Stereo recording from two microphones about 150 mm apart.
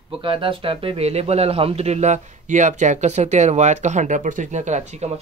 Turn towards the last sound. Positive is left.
turn(degrees=-50)  # may be behind; listen again after turning